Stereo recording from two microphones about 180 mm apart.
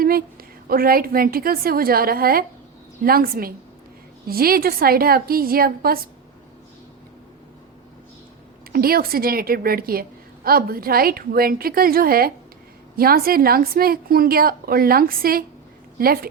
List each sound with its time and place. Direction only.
0.0 s a sound: 55° right (ahead or behind)
0.7 s a woman's voice: 55° right (ahead or behind)
8.7 s a woman's voice: 55° right (ahead or behind)